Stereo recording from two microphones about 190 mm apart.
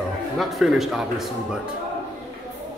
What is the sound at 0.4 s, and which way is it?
Speech, centre (ahead or behind).